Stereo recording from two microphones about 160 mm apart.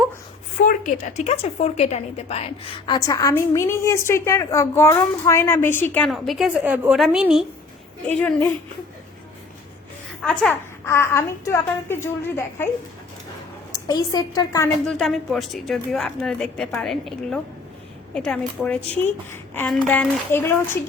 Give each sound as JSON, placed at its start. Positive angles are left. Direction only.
{"t": 0.6, "sound": "a woman's voice", "side_deg": 55}
{"t": 6.1, "sound": "a woman's voice", "side_deg": 0}
{"t": 8.0, "sound": "a woman's voice", "side_deg": 10}
{"t": 10.2, "sound": "a woman's voice", "side_deg": 5}
{"t": 13.7, "sound": "a woman's voice", "side_deg": 25}
{"t": 14.8, "sound": "a woman's voice", "side_deg": 0}